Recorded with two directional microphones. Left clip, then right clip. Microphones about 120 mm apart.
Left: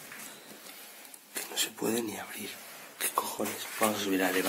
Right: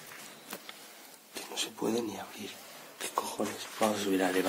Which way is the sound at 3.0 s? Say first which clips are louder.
Left 2 dB; 20° right (ahead or behind).